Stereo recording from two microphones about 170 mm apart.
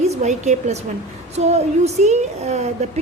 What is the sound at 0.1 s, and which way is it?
A woman's voice, 45° right (ahead or behind).